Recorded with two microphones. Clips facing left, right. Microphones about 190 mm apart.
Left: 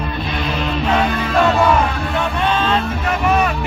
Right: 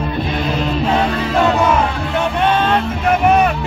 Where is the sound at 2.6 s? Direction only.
55° right (ahead or behind).